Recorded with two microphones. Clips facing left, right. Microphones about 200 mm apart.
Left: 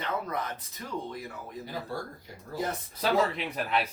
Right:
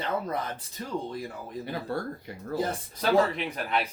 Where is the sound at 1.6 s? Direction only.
65° right (ahead or behind).